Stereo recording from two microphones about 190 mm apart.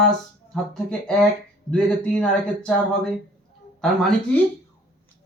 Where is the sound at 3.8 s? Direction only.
Centre (ahead or behind).